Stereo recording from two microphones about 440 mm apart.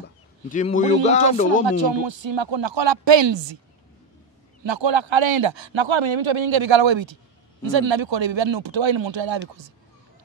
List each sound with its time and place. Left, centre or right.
0.5 s speech: centre
1.7 s speech: right
4.6 s a man's voice: right